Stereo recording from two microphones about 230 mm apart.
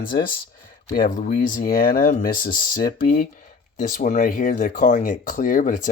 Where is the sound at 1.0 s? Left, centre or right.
Left.